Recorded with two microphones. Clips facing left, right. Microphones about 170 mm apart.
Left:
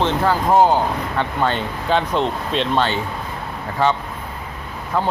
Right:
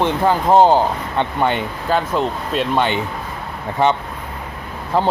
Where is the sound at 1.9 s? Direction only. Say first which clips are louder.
Even; 5° right (ahead or behind).